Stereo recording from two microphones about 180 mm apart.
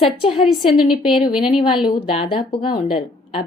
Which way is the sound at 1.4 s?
30° left (ahead or behind).